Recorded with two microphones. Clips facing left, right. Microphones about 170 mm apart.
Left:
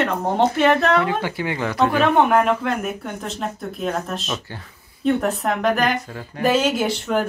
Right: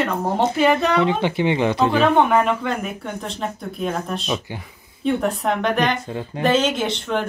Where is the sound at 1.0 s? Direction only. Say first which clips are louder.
Right 4 dB; 20° right (ahead or behind).